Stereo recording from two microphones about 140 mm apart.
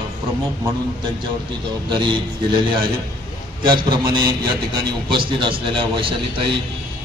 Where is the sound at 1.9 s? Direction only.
35° right (ahead or behind).